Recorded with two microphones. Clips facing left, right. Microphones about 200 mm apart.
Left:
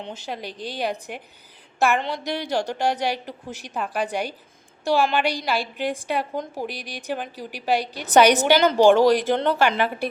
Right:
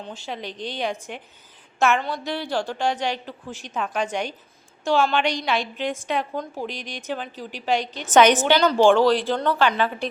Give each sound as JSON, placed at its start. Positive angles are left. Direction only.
{"t": 0.3, "sound": "a woman's voice", "side_deg": 10}